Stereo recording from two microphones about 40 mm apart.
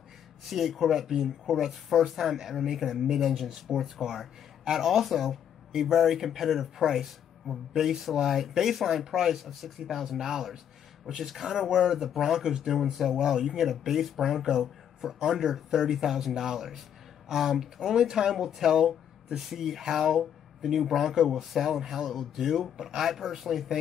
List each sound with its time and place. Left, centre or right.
0.5 s speech: centre
2.8 s speech: centre
3.2 s speech: centre